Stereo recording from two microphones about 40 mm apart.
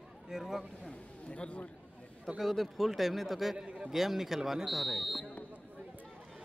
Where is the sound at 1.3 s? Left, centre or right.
Left.